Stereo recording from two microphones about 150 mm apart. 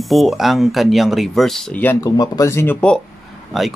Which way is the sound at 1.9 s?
25° left (ahead or behind).